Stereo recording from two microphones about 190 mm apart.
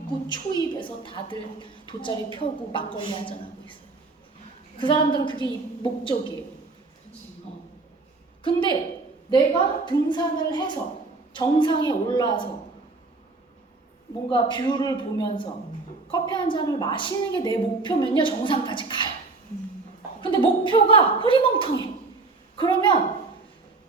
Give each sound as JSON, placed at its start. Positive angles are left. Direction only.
{"t": 0.3, "sound": "a woman's voice", "side_deg": 25}
{"t": 4.8, "sound": "a woman's voice", "side_deg": 25}
{"t": 8.4, "sound": "a woman's voice", "side_deg": 25}
{"t": 14.3, "sound": "a woman's voice", "side_deg": 25}
{"t": 20.2, "sound": "a woman's voice", "side_deg": 25}